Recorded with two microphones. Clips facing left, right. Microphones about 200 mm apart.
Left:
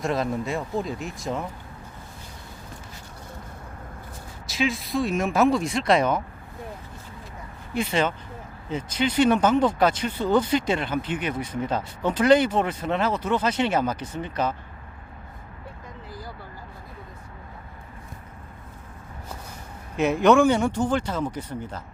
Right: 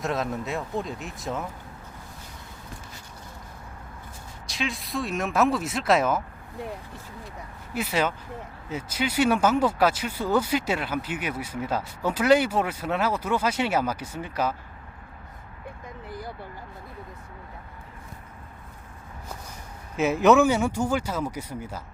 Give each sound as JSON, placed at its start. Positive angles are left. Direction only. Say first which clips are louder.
{"t": 0.0, "sound": "speech", "louder": "left 3 dB", "side_deg": 0}
{"t": 4.4, "sound": "speech", "louder": "left 6 dB", "side_deg": 0}
{"t": 7.7, "sound": "speech", "louder": "left 2 dB", "side_deg": -5}
{"t": 16.0, "sound": "vehicle", "louder": "right 3 dB", "side_deg": -60}
{"t": 20.0, "sound": "speech", "louder": "left 1 dB", "side_deg": 0}